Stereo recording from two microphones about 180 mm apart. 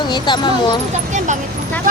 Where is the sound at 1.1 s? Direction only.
45° right (ahead or behind).